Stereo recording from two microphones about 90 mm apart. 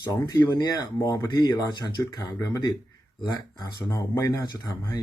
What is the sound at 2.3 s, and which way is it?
Speech, 35° left (ahead or behind).